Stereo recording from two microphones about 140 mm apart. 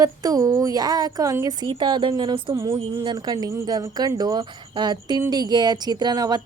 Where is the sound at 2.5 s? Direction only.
20° right (ahead or behind).